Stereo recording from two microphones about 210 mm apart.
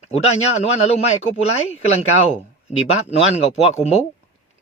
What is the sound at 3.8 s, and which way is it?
Speech, 30° left (ahead or behind).